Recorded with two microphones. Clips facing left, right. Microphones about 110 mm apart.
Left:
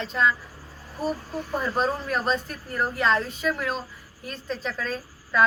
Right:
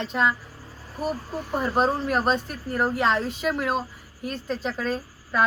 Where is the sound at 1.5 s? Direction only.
15° right (ahead or behind).